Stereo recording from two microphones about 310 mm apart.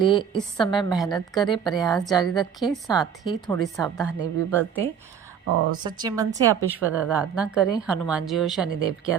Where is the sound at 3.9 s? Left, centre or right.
Centre.